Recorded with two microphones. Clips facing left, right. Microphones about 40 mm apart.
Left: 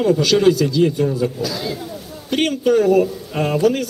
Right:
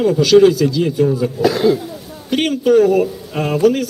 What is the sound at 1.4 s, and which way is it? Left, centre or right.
Speech, right.